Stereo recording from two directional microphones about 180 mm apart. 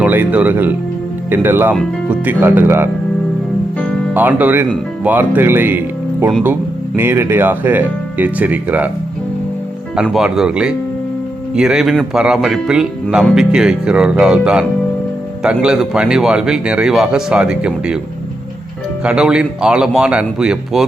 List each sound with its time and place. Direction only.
0.0 s speech: 10° right (ahead or behind)
4.1 s speech: 10° right (ahead or behind)
9.9 s speech: 5° right (ahead or behind)
19.0 s speech: 5° right (ahead or behind)